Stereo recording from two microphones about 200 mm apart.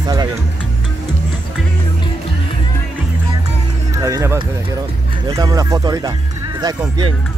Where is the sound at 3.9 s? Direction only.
15° right (ahead or behind).